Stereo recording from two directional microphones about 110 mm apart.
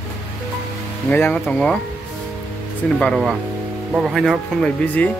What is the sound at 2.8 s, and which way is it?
Speech, 5° left (ahead or behind).